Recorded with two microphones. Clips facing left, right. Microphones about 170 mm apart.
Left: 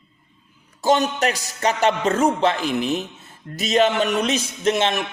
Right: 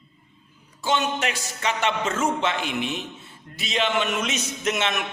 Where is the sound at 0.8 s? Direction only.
40° left (ahead or behind).